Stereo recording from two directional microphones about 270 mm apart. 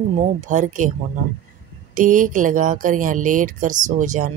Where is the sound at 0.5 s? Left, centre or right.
Right.